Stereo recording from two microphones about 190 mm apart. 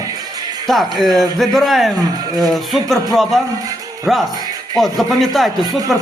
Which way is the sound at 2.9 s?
Centre (ahead or behind).